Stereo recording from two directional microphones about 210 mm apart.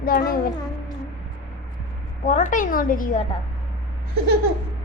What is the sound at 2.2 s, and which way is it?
Speech, 35° left (ahead or behind).